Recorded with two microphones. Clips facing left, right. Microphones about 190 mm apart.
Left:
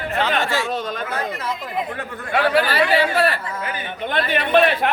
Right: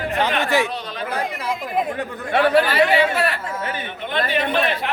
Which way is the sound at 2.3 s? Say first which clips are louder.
Right 2 dB; 25° right (ahead or behind).